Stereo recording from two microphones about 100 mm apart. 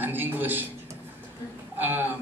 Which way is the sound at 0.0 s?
20° right (ahead or behind).